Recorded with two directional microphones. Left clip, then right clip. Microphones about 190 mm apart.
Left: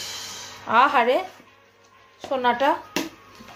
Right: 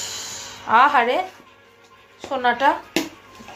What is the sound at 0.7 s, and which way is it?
Speech, 15° left (ahead or behind).